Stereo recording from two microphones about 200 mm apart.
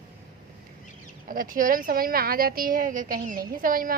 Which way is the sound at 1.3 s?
45° right (ahead or behind).